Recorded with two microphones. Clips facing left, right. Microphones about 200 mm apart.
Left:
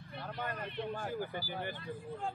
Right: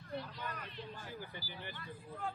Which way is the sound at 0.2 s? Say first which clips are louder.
Left 6 dB; 55° left (ahead or behind).